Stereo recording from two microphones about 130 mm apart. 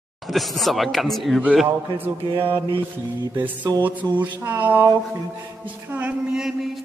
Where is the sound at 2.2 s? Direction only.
40° right (ahead or behind).